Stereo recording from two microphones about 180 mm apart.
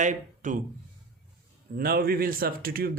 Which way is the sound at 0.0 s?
45° right (ahead or behind).